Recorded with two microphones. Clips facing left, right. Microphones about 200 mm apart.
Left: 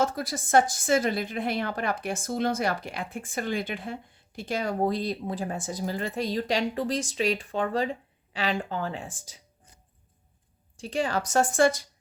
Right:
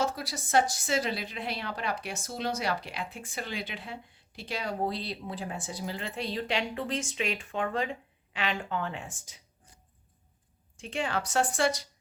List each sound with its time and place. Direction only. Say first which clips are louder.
0.0 s a woman's voice: left 4 dB; 50° left (ahead or behind); by 9.4 s 35° left (ahead or behind)
10.8 s a woman's voice: left 4 dB; 35° left (ahead or behind)